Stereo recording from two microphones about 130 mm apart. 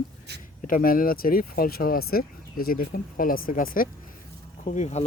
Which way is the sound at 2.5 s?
90° left.